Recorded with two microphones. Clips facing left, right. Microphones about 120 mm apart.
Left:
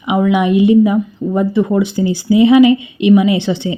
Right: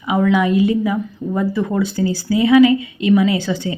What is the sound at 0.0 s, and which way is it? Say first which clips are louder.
A woman's voice: left 2 dB; 15° left (ahead or behind).